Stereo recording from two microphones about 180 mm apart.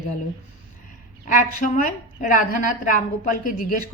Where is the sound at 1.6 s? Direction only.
45° left (ahead or behind).